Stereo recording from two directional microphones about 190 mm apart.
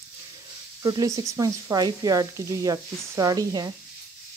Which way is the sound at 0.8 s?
20° right (ahead or behind).